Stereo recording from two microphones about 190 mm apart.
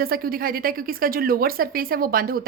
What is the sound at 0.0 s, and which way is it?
Speech, 50° right (ahead or behind).